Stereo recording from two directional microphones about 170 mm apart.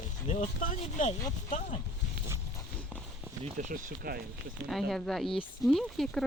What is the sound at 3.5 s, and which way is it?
Speech, 50° right (ahead or behind).